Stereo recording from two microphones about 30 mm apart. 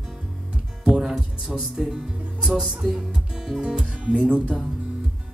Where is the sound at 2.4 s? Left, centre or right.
Centre.